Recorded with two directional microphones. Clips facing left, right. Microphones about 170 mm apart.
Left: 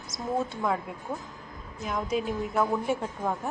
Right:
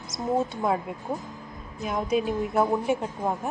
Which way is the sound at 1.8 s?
20° right (ahead or behind).